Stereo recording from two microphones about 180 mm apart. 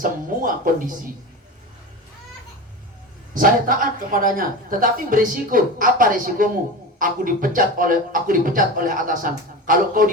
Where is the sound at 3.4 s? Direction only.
50° right (ahead or behind).